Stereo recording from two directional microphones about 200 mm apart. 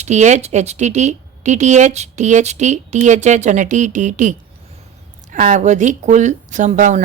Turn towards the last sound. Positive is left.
turn(degrees=-40)  # may be behind; listen again after turning